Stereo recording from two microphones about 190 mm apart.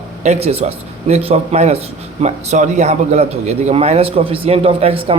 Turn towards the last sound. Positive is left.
turn(degrees=-30)  # may be behind; listen again after turning